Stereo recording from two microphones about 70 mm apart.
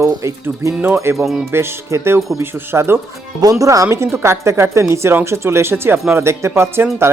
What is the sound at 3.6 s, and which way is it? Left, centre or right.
Speech, right.